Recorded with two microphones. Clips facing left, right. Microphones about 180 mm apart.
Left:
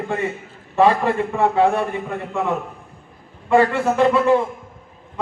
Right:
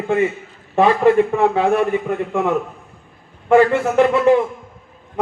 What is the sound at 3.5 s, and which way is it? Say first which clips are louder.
Speech: right 3 dB; 65° right (ahead or behind).